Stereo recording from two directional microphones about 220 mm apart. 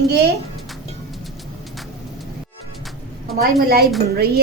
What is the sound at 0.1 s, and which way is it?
Speech, 50° right (ahead or behind).